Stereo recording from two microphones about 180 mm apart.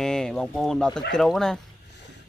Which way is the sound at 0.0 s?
5° left (ahead or behind).